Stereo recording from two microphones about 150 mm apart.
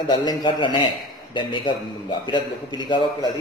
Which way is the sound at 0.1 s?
30° left (ahead or behind).